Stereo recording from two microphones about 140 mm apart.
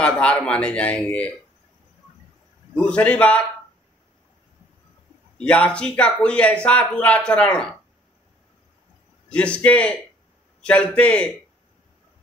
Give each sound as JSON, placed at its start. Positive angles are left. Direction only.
{"t": 0.0, "sound": "a man's voice", "side_deg": 10}
{"t": 2.7, "sound": "a man's voice", "side_deg": 10}
{"t": 5.4, "sound": "a man's voice", "side_deg": 10}
{"t": 9.3, "sound": "a man's voice", "side_deg": 10}